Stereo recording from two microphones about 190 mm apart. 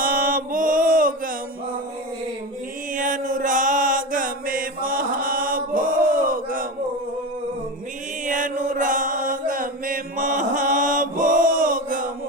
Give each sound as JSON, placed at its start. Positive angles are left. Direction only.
{"t": 0.0, "sound": "mantra", "side_deg": -45}
{"t": 2.9, "sound": "chant", "side_deg": -45}
{"t": 8.2, "sound": "chant", "side_deg": -45}